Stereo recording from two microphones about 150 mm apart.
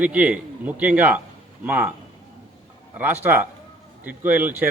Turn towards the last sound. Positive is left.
turn(degrees=-10)  # may be behind; listen again after turning